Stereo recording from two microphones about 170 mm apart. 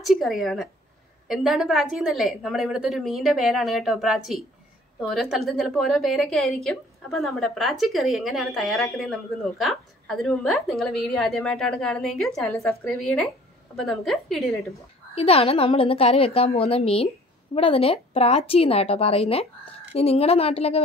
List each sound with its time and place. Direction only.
0.0 s speech: centre (ahead or behind)
15.1 s a woman's voice: 35° left (ahead or behind)